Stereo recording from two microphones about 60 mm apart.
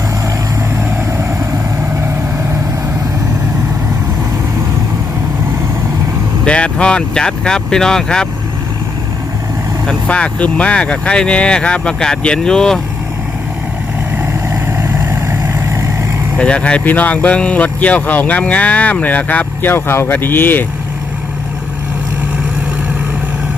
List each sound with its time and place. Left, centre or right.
6.4 s speech: centre
9.8 s speech: centre
15.3 s vehicle: right
16.4 s speech: centre
19.7 s speech: left